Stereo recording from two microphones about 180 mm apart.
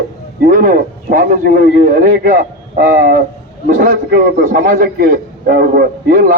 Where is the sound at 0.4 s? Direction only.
50° right (ahead or behind).